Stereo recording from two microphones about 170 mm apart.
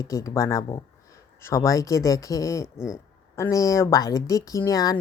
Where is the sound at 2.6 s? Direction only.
5° right (ahead or behind).